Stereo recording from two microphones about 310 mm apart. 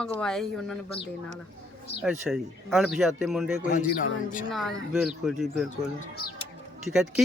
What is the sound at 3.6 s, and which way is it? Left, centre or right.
Speech, left.